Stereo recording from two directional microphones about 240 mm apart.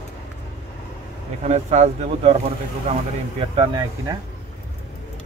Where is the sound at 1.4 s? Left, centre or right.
Right.